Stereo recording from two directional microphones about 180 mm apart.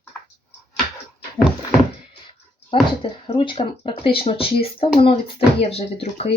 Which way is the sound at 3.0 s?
30° left (ahead or behind).